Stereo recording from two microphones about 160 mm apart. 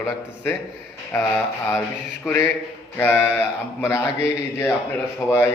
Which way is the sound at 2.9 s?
15° left (ahead or behind).